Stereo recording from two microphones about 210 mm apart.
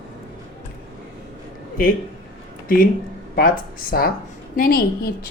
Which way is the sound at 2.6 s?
40° left (ahead or behind).